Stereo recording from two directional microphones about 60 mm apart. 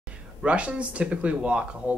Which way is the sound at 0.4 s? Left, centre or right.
Right.